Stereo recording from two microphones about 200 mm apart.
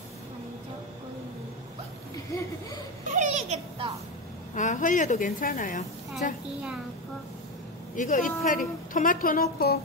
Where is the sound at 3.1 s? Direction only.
35° right (ahead or behind).